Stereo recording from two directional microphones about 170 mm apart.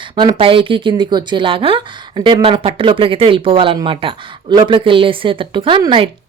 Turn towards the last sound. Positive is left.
turn(degrees=-30)  # may be behind; listen again after turning